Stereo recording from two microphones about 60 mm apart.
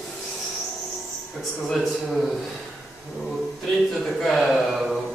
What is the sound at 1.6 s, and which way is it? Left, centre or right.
Speech, centre.